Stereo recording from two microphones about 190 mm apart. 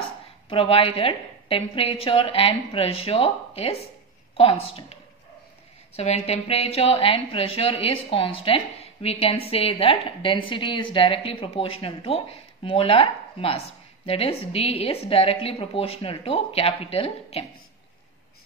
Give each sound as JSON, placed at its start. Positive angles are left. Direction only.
{"t": 0.0, "sound": "a woman's voice", "side_deg": 30}
{"t": 5.9, "sound": "a woman's voice", "side_deg": 35}